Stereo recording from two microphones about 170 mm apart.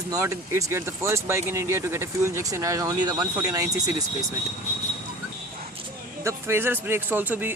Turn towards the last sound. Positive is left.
turn(degrees=-10)  # may be behind; listen again after turning